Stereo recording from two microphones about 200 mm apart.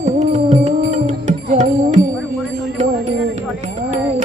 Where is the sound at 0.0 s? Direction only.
35° right (ahead or behind).